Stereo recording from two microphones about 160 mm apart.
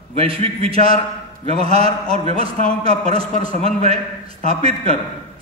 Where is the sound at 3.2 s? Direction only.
55° left (ahead or behind).